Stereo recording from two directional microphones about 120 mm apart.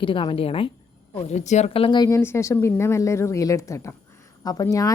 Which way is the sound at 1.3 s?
70° left (ahead or behind).